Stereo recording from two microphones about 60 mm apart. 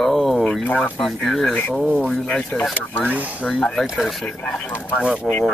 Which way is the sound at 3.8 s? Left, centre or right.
Centre.